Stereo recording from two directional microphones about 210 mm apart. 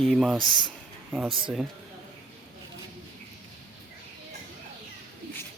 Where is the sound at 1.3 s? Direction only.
25° right (ahead or behind).